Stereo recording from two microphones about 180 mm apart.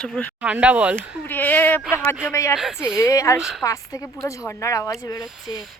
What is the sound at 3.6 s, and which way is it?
A woman's voice, 20° left (ahead or behind).